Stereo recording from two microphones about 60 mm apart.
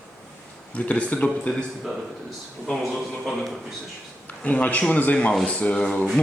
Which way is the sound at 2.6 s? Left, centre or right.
Centre.